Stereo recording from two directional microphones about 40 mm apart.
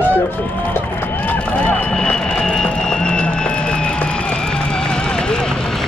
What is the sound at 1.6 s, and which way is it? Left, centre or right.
Vehicle, centre.